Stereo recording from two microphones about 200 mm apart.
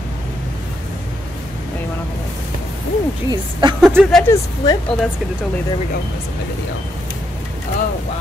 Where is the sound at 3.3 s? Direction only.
20° right (ahead or behind).